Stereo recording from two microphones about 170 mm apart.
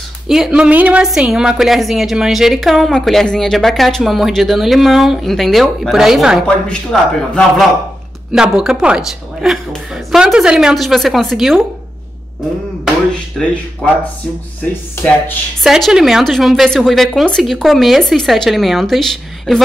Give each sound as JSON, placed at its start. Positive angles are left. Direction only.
{"t": 0.3, "sound": "a woman's voice", "side_deg": -5}
{"t": 13.4, "sound": "a woman's voice", "side_deg": 0}
{"t": 15.6, "sound": "a woman's voice", "side_deg": 0}